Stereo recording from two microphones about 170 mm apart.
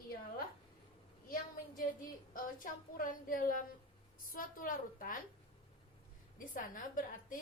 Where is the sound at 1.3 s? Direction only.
55° left (ahead or behind).